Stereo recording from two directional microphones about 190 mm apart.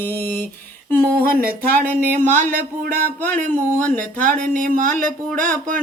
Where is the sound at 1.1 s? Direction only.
55° right (ahead or behind).